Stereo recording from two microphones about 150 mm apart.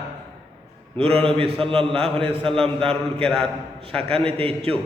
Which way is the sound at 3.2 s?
5° left (ahead or behind).